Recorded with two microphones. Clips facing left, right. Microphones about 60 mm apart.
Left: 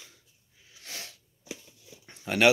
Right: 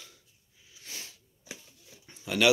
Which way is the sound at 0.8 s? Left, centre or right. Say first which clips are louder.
Left 3 dB; left.